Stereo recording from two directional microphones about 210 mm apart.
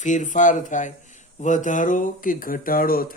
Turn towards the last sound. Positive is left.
turn(degrees=45)  # may be behind; listen again after turning